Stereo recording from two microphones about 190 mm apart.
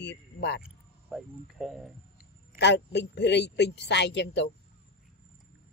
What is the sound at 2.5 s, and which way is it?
Speech, 65° left (ahead or behind).